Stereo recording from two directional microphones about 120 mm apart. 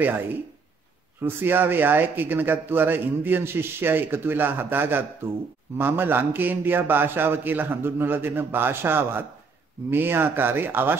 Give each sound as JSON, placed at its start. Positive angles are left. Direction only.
{"t": 1.2, "sound": "a man's voice", "side_deg": -15}